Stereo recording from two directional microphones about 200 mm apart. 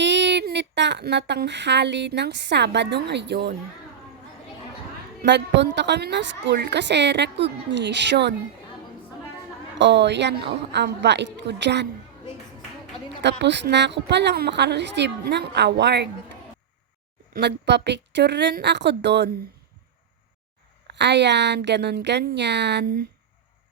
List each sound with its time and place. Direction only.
0.0 s speech: 60° right (ahead or behind)
5.2 s a woman's voice: 60° right (ahead or behind)
9.7 s a woman's voice: 60° right (ahead or behind)
13.2 s a woman's voice: 60° right (ahead or behind)
17.3 s a woman's voice: 60° right (ahead or behind)
20.8 s a woman's voice: 60° right (ahead or behind)